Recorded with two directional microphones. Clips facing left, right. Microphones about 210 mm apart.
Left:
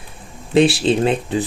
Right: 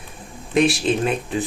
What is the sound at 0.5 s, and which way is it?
Speech, 30° left (ahead or behind).